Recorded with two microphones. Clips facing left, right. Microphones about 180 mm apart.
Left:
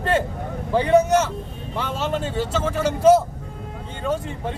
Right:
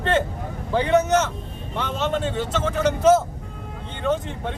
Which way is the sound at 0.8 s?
35° left (ahead or behind).